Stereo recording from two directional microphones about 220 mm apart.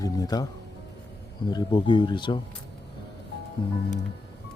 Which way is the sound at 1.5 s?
20° left (ahead or behind).